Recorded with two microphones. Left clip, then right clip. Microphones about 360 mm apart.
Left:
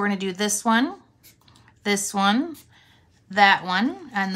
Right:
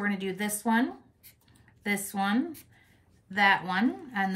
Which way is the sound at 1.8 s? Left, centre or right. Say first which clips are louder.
Left 8 dB; centre.